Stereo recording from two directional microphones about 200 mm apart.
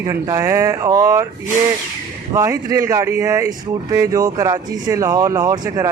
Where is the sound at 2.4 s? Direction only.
15° right (ahead or behind).